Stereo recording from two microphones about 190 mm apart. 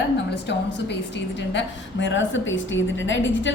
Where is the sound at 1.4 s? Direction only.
70° left (ahead or behind).